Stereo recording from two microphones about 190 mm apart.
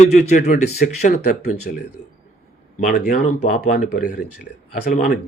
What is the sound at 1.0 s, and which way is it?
Speech, 55° left (ahead or behind).